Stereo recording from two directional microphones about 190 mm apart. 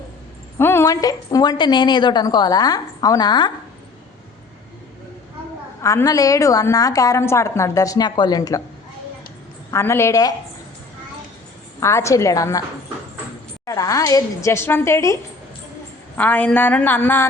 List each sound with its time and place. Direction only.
0.6 s a woman's voice: 15° left (ahead or behind)
5.8 s a woman's voice: 15° left (ahead or behind)
9.7 s a woman's voice: 15° left (ahead or behind)
11.8 s a woman's voice: 15° left (ahead or behind)
13.7 s a woman's voice: 15° left (ahead or behind)